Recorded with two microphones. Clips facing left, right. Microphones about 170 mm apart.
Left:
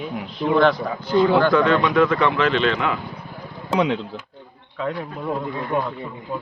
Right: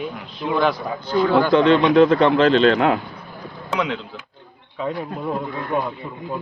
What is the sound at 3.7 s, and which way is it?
Speech, 30° left (ahead or behind).